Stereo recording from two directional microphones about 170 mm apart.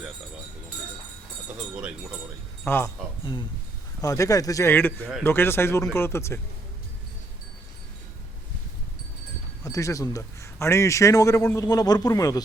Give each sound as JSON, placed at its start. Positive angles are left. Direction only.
{"t": 1.7, "sound": "speech", "side_deg": -5}
{"t": 2.6, "sound": "speech", "side_deg": 15}
{"t": 4.0, "sound": "speech", "side_deg": 20}
{"t": 9.6, "sound": "a man's voice", "side_deg": 20}